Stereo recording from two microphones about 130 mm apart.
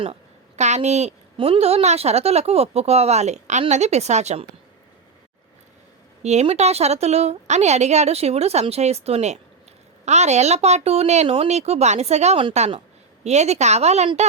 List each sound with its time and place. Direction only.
0.0 s a sound: 55° right (ahead or behind)
1.4 s a woman's voice: 45° right (ahead or behind)
6.2 s a woman's voice: 55° right (ahead or behind)